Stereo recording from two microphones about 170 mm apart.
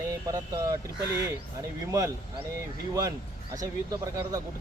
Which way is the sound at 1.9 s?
20° right (ahead or behind).